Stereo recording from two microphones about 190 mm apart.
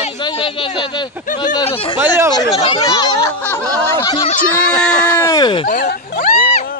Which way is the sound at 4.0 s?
25° left (ahead or behind).